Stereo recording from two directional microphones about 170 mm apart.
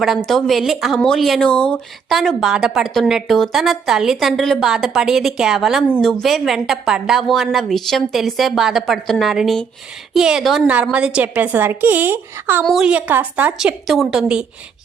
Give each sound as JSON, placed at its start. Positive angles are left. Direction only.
{"t": 0.0, "sound": "a woman's voice", "side_deg": 0}
{"t": 12.6, "sound": "speech", "side_deg": 0}